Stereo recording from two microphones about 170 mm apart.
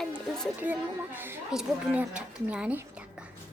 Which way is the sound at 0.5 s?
10° right (ahead or behind).